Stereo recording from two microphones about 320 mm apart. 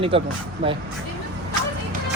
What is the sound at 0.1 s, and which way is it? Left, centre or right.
Speech, centre.